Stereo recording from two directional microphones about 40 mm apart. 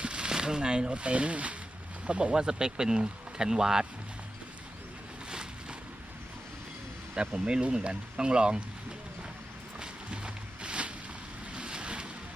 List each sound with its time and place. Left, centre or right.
0.0 s speech: right
7.1 s speech: right
9.8 s a sound: right
11.5 s boat: right